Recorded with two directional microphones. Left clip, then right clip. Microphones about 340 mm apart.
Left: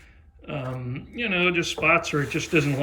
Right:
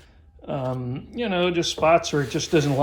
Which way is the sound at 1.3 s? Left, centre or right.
Right.